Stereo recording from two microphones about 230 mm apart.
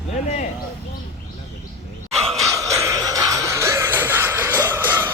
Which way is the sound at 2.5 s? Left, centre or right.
Centre.